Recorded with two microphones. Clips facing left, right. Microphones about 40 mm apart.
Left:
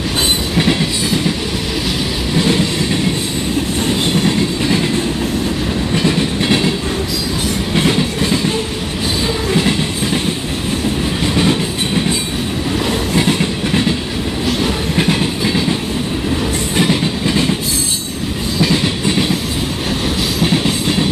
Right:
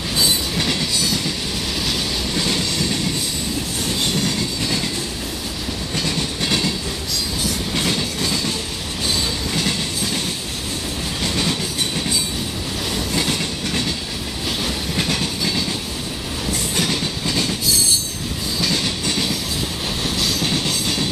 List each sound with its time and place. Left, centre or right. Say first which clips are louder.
0.6 s train: left 6 dB; left
2.3 s train: left 9 dB; left
5.9 s train: left 7 dB; left
7.7 s train: left 9 dB; left
11.3 s train: left 7 dB; left
13.1 s train: left 7 dB; left
16.7 s train: left 8 dB; left
18.6 s train: left 7 dB; left
20.4 s train: left 6 dB; left